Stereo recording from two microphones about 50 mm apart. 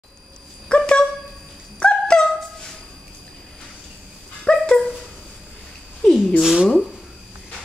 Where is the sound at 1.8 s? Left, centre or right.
Centre.